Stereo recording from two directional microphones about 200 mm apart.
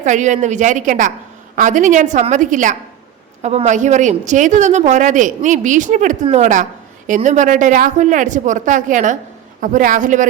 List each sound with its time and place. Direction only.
0.0 s a woman's voice: 40° right (ahead or behind)